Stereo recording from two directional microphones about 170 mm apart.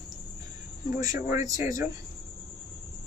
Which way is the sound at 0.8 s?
20° right (ahead or behind).